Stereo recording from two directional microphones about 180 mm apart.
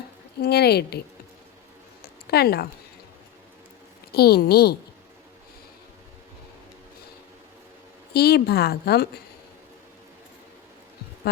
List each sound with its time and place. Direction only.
0.4 s a woman's voice: 65° left (ahead or behind)
2.3 s a woman's voice: 60° left (ahead or behind)
4.1 s a woman's voice: 60° left (ahead or behind)
8.1 s a woman's voice: 60° left (ahead or behind)